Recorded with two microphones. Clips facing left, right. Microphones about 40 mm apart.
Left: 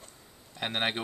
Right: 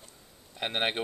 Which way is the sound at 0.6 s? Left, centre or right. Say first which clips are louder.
Right 1 dB; centre.